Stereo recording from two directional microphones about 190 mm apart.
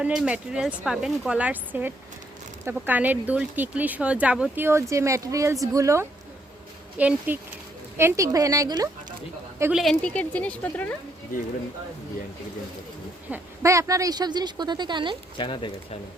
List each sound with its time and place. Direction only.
0.0 s speech: 5° right (ahead or behind); by 9.1 s 20° right (ahead or behind)
9.7 s speech: centre (ahead or behind)
13.3 s speech: 15° right (ahead or behind)
15.4 s speech: 25° left (ahead or behind)